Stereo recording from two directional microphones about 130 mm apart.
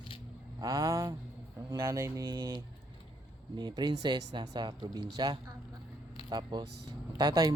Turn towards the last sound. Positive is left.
turn(degrees=-30)  # may be behind; listen again after turning